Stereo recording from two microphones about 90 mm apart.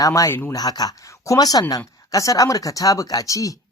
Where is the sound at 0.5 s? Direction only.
50° left (ahead or behind).